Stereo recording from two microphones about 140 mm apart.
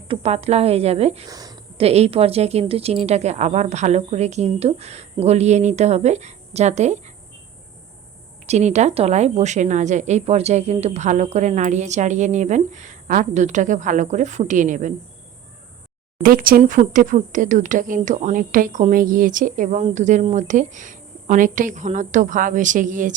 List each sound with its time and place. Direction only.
0.1 s a woman's voice: 45° right (ahead or behind)
1.3 s speech: 25° right (ahead or behind)
1.8 s a woman's voice: 45° right (ahead or behind)
8.4 s a woman's voice: 55° right (ahead or behind)
16.2 s speech: 90° right
16.9 s a woman's voice: 70° right (ahead or behind)